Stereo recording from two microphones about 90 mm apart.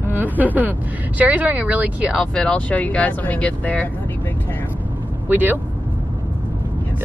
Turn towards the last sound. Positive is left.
turn(degrees=-20)  # may be behind; listen again after turning